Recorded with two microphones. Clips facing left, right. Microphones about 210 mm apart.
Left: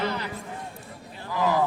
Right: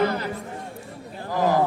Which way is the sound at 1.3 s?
45° right (ahead or behind).